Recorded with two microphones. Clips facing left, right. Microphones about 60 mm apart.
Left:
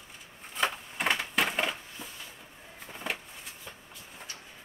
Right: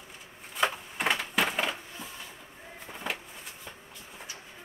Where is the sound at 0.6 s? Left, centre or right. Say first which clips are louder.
Right 2 dB; centre.